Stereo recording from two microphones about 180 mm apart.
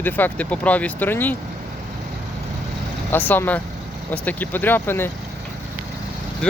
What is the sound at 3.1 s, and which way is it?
Speech, 10° left (ahead or behind).